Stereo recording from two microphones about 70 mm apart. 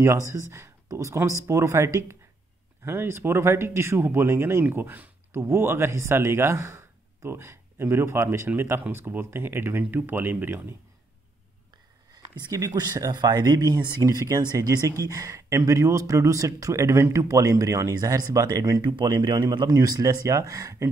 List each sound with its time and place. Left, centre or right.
0.3 s speech: right
12.5 s speech: right
14.0 s speech: right
18.5 s speech: right